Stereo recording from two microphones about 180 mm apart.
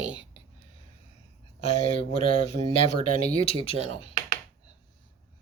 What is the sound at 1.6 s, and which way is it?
Speech, 35° left (ahead or behind).